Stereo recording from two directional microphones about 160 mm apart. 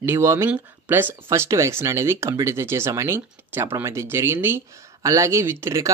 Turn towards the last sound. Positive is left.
turn(degrees=-15)  # may be behind; listen again after turning